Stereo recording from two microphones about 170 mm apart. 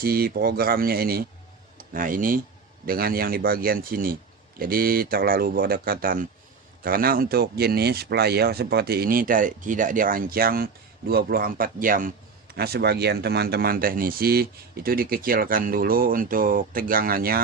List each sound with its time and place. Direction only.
0.0 s speech: 65° right (ahead or behind)
12.5 s speech: 65° right (ahead or behind)